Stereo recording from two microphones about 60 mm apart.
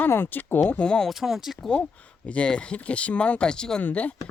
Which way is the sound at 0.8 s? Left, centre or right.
Centre.